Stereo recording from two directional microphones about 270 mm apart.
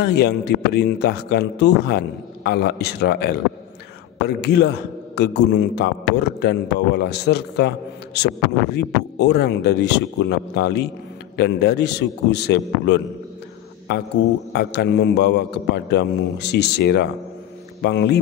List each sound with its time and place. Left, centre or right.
0.0 s a man's voice: left
14.5 s a man's voice: left